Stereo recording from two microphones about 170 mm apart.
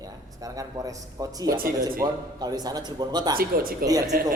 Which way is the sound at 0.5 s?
20° right (ahead or behind).